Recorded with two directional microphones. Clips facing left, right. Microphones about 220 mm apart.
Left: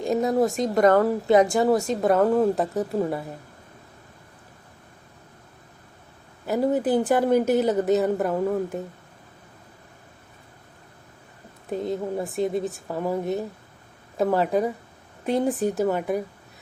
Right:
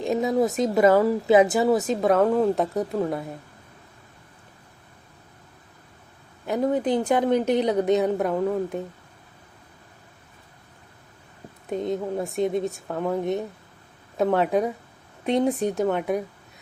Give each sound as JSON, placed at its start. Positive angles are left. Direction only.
{"t": 0.0, "sound": "speech", "side_deg": 0}
{"t": 6.4, "sound": "speech", "side_deg": 5}
{"t": 11.7, "sound": "speech", "side_deg": 0}